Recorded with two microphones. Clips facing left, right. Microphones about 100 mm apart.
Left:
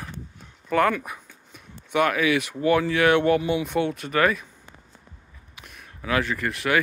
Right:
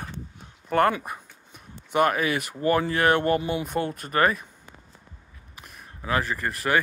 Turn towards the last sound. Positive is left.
turn(degrees=-35)  # may be behind; listen again after turning